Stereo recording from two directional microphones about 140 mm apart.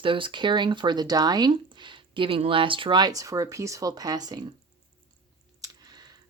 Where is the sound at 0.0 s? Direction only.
35° right (ahead or behind).